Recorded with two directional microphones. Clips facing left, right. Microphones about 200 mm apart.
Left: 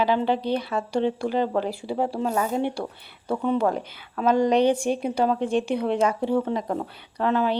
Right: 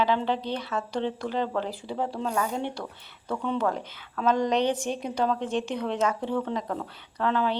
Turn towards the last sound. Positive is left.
turn(degrees=10)  # may be behind; listen again after turning